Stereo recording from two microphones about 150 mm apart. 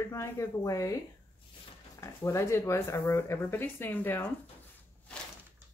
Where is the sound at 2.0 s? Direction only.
20° left (ahead or behind).